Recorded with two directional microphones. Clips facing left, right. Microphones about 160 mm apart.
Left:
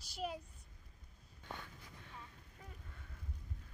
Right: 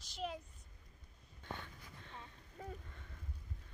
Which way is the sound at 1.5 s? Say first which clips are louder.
Right 2 dB; 10° left (ahead or behind).